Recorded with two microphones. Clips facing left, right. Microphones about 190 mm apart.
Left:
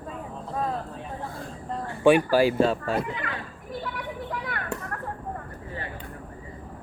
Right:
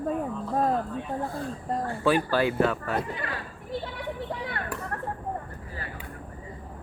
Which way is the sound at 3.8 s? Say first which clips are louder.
Even; 30° right (ahead or behind).